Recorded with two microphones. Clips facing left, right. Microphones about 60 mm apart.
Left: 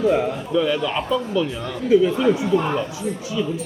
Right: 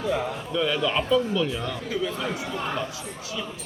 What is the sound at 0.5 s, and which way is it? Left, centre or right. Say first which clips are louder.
Speech: left 3 dB; centre.